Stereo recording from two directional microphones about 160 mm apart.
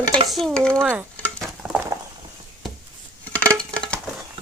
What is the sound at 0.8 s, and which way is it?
Speech, 10° right (ahead or behind).